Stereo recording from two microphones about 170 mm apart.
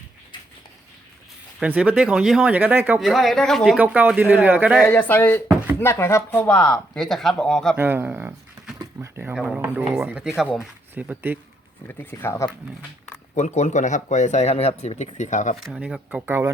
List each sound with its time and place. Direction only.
1.5 s speech: 5° right (ahead or behind)
3.0 s speech: centre (ahead or behind)
4.9 s speech: 10° left (ahead or behind)
7.8 s speech: 10° right (ahead or behind)
11.9 s speech: 10° left (ahead or behind)
13.3 s speech: 40° left (ahead or behind)
15.7 s speech: 5° right (ahead or behind)